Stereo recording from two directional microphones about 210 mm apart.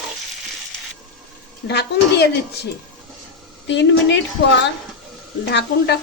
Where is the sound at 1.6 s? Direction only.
50° left (ahead or behind).